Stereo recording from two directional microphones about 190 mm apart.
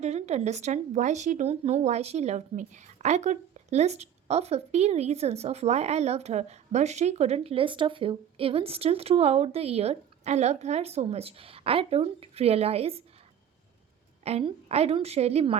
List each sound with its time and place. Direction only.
0.0 s speech: 35° right (ahead or behind)
14.3 s speech: 35° right (ahead or behind)